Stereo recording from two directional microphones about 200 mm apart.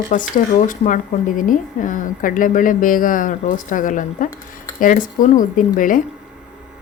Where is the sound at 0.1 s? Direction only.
40° left (ahead or behind).